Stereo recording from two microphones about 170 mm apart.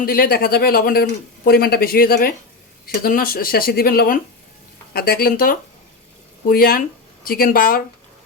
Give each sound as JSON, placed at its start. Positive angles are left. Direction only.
{"t": 0.0, "sound": "speech", "side_deg": 60}